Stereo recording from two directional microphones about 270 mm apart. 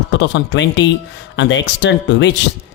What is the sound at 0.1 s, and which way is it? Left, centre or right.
Speech, left.